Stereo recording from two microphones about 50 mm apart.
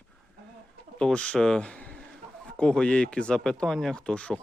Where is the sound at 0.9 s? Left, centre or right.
Centre.